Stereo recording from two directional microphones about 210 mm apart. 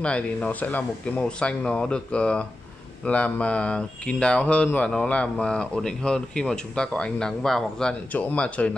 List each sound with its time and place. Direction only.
0.0 s speech: 5° left (ahead or behind)